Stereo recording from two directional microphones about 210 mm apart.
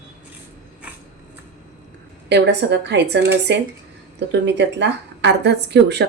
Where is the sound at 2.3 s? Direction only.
55° right (ahead or behind).